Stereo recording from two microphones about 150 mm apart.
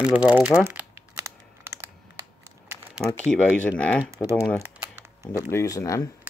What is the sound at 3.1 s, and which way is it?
Speech, 5° left (ahead or behind).